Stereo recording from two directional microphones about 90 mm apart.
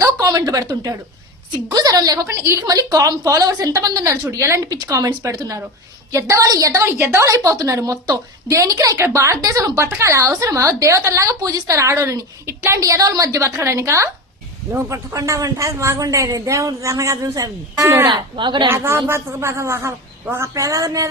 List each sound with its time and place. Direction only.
0.0 s a woman's voice: 40° right (ahead or behind)
2.2 s a man's voice: 30° right (ahead or behind)
18.1 s a woman's voice: 60° right (ahead or behind)
18.7 s a man's voice: 30° right (ahead or behind)